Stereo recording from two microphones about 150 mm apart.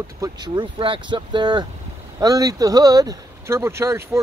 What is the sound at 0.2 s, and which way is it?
Speech, 30° right (ahead or behind).